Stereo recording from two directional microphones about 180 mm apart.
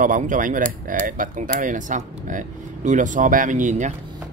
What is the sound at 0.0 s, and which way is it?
Speech, 45° right (ahead or behind).